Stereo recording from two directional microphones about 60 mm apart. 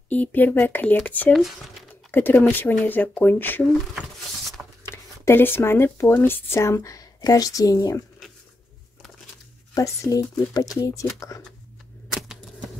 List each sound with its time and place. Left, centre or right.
0.1 s speech: left
1.3 s speech: centre
2.0 s speech: left
4.8 s speech: left
9.8 s speech: left
10.8 s speech: left
12.1 s a sound: centre